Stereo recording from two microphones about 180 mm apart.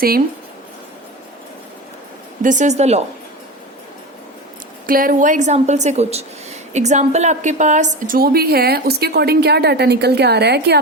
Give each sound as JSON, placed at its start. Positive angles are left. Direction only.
{"t": 2.4, "sound": "a woman's voice", "side_deg": -45}
{"t": 4.9, "sound": "a woman's voice", "side_deg": -50}